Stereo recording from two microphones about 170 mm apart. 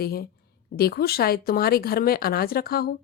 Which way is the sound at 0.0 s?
65° left (ahead or behind).